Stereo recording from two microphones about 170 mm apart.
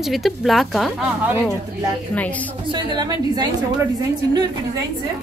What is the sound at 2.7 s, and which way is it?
Speech, 25° right (ahead or behind).